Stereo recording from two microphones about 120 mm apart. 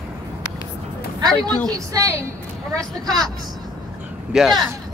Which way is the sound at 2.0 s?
25° right (ahead or behind).